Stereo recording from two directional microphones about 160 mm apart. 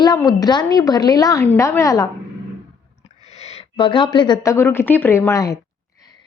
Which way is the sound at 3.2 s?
40° left (ahead or behind).